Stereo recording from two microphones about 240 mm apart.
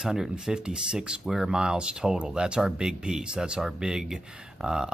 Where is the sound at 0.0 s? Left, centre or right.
Centre.